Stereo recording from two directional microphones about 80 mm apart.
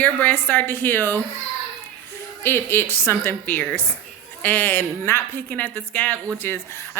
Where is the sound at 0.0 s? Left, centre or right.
Centre.